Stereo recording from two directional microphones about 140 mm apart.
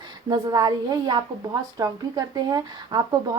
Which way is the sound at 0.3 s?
30° right (ahead or behind).